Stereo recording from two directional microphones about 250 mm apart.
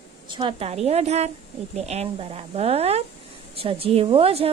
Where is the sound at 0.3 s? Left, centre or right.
Centre.